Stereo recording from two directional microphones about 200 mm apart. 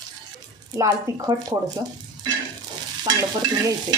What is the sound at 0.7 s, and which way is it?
Speech, 15° right (ahead or behind).